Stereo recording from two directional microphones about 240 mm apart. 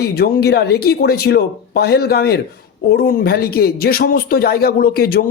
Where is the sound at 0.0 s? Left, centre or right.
Left.